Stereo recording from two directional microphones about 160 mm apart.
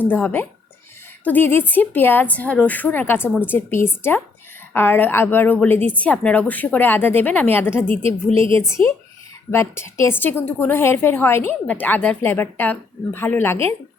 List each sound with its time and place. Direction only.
0.0 s a woman's voice: 10° left (ahead or behind)